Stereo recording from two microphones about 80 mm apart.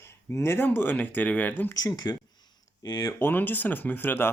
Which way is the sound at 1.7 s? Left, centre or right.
Left.